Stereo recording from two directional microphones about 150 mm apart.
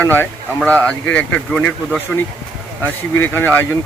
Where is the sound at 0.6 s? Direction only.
10° left (ahead or behind).